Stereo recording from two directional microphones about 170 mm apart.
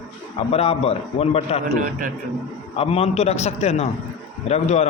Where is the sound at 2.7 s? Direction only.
35° left (ahead or behind).